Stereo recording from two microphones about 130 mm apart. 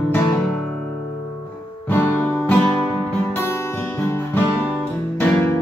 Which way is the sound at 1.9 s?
15° left (ahead or behind).